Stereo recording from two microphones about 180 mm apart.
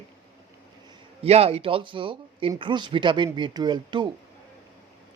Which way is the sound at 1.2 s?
35° right (ahead or behind).